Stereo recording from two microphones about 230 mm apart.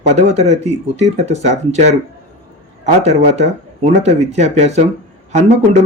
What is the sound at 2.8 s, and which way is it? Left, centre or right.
Speech, right.